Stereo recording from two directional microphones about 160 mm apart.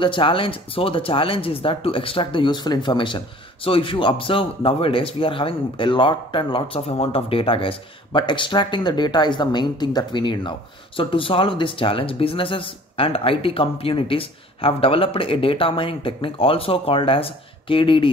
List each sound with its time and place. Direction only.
0.0 s speech: 30° left (ahead or behind)